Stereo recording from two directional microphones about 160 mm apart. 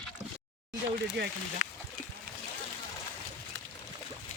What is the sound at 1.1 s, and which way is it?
Speech, 90° right.